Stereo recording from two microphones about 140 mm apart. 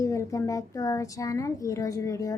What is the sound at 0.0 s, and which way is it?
A woman's voice, 25° left (ahead or behind).